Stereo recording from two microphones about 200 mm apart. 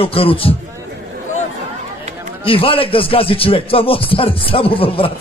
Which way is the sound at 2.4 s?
25° left (ahead or behind).